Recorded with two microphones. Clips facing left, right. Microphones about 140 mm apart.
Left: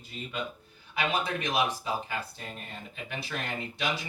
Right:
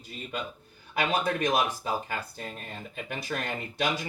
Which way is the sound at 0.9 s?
45° right (ahead or behind).